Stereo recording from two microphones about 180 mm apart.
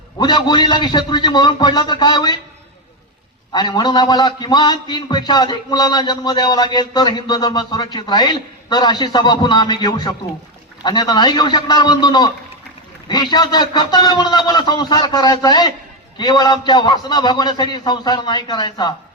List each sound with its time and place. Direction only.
0.2 s a man's voice: 25° left (ahead or behind)
3.5 s a man's voice: 25° left (ahead or behind)